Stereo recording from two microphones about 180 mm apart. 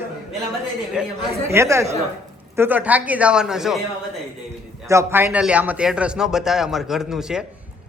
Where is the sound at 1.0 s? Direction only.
5° right (ahead or behind).